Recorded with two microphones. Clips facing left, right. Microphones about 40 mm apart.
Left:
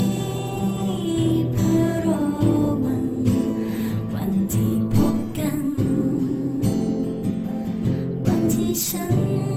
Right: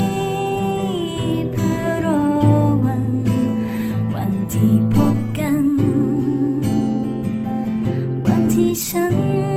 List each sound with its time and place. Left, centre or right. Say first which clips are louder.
1.6 s music: even; right
4.3 s music: right 4 dB; right
8.3 s music: right 5 dB; right